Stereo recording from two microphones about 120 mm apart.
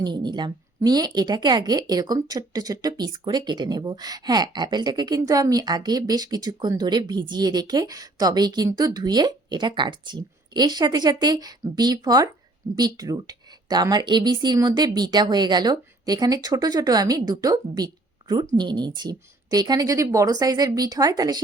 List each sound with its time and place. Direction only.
0.0 s a woman's voice: 40° right (ahead or behind)